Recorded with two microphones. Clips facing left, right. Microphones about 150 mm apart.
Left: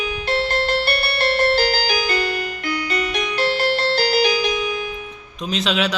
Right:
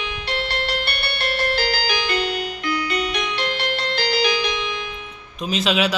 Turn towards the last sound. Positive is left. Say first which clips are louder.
# right 1 dB
turn(degrees=-5)  # may be behind; listen again after turning